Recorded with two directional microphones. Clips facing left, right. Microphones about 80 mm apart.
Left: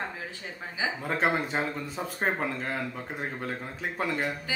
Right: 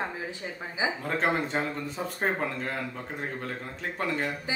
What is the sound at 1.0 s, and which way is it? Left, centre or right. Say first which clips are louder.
Speech: left 2 dB; centre.